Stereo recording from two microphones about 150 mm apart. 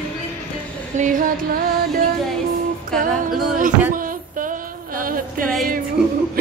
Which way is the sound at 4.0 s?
65° right (ahead or behind).